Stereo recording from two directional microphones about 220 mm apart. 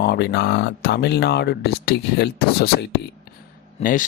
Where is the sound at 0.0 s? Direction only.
50° left (ahead or behind).